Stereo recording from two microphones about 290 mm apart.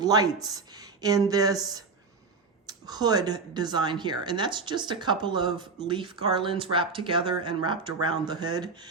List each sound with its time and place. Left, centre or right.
0.0 s a woman's voice: centre